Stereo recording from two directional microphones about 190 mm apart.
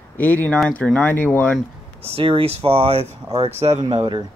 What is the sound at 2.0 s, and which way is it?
Speech, 30° right (ahead or behind).